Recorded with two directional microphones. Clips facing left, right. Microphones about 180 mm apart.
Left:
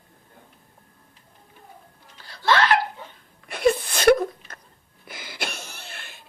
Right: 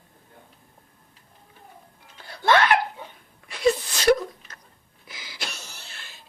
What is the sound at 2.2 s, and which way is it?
Laughter, 55° right (ahead or behind).